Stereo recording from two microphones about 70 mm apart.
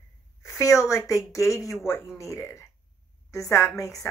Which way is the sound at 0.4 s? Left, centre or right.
Left.